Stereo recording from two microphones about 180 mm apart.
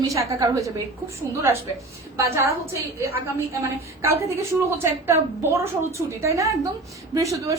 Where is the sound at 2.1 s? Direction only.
15° right (ahead or behind).